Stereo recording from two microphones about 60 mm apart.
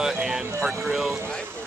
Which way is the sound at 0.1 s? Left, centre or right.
Centre.